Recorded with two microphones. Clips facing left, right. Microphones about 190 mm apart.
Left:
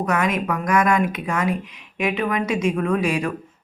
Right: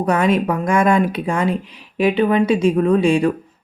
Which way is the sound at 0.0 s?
30° right (ahead or behind).